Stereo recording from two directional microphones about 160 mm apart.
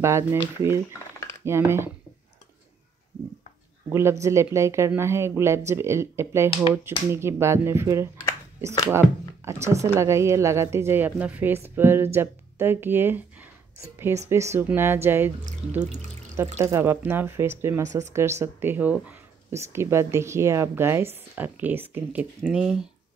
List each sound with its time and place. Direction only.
0.0 s speech: 15° right (ahead or behind)
3.9 s speech: 15° right (ahead or behind)